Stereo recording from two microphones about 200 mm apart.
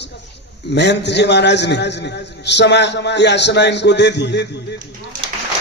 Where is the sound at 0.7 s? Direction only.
60° left (ahead or behind).